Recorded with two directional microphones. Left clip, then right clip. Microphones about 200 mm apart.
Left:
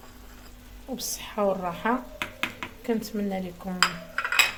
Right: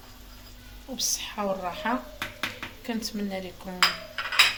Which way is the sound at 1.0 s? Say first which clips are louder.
Left 1 dB; 55° left (ahead or behind).